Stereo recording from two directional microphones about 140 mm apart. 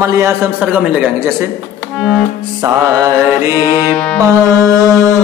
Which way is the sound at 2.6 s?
25° right (ahead or behind).